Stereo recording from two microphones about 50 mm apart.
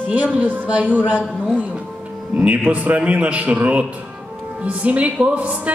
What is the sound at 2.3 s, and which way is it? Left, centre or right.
Music, right.